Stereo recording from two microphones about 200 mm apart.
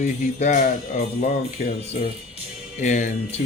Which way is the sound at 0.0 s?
35° left (ahead or behind).